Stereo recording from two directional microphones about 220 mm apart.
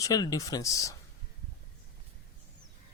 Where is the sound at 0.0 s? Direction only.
15° left (ahead or behind).